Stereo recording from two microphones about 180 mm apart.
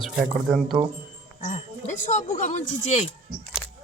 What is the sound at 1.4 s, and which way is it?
Speech, 45° left (ahead or behind).